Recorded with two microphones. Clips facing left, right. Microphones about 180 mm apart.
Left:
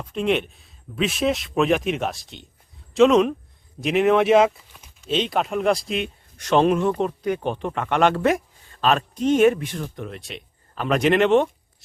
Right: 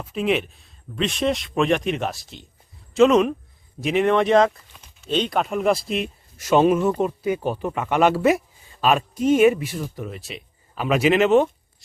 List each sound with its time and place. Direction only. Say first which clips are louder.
0.0 s speech: even; 5° right (ahead or behind)